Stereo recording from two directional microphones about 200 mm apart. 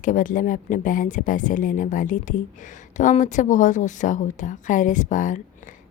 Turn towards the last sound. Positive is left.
turn(degrees=40)  # may be behind; listen again after turning